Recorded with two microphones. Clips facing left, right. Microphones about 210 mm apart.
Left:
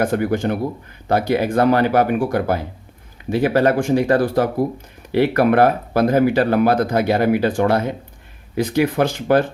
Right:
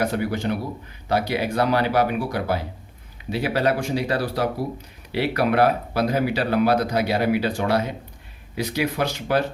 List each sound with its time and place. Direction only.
0.0 s speech: 50° left (ahead or behind)